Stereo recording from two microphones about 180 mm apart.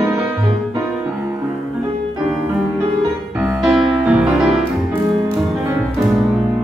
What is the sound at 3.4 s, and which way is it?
Music, 5° right (ahead or behind).